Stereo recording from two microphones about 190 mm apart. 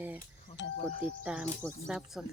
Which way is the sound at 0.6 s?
70° left (ahead or behind).